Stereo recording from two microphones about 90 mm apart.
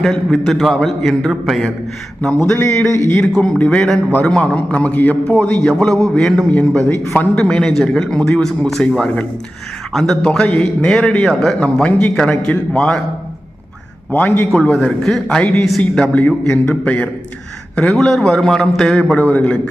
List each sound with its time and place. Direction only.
0.0 s a man's voice: 5° left (ahead or behind)
2.6 s speech: 35° left (ahead or behind)
3.8 s a man's voice: 5° left (ahead or behind)
14.1 s a man's voice: 15° left (ahead or behind)